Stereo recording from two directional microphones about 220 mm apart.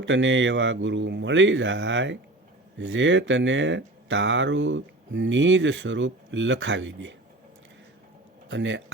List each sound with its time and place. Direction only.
0.0 s speech: 55° right (ahead or behind)
8.4 s speech: 55° right (ahead or behind)